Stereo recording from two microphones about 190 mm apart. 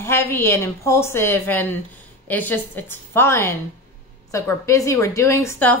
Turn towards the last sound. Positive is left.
turn(degrees=10)  # may be behind; listen again after turning